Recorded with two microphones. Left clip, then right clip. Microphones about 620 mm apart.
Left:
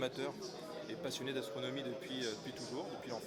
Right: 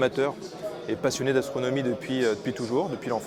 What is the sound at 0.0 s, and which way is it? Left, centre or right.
Speech, right.